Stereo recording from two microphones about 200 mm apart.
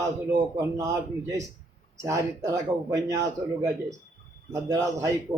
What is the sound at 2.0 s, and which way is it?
A man's voice, 15° right (ahead or behind).